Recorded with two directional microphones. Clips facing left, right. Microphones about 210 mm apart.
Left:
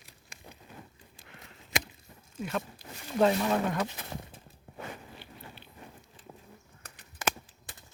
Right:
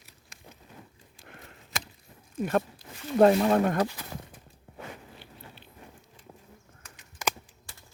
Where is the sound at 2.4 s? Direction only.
50° right (ahead or behind).